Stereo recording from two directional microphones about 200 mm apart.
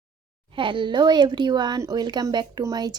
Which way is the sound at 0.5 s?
25° right (ahead or behind).